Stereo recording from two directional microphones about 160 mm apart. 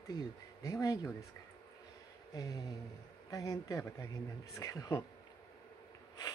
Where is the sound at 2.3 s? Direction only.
20° left (ahead or behind).